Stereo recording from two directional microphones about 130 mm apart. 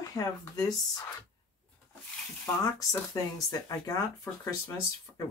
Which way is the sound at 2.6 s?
25° left (ahead or behind).